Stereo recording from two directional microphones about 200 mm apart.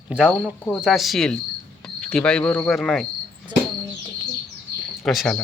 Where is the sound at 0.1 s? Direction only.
5° right (ahead or behind).